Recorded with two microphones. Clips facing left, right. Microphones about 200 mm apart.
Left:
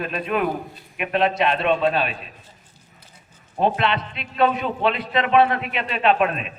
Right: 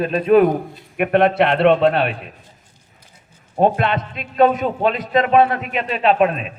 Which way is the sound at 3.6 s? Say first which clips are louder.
Right 4 dB; 45° right (ahead or behind).